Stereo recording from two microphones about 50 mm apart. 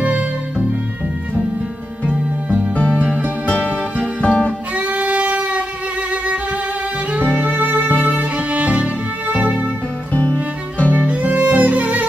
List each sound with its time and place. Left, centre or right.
0.0 s music: right
2.4 s music: right
2.7 s music: left
3.7 s music: right
4.2 s music: left
4.7 s violin: right
7.1 s music: right
10.9 s music: right